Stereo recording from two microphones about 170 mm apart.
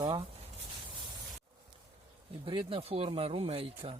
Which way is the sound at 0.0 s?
30° right (ahead or behind).